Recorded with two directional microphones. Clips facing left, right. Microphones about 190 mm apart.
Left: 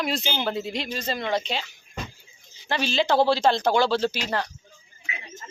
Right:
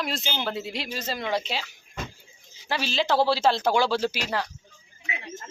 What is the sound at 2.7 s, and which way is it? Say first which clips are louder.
A man's voice: left 2 dB; centre (ahead or behind).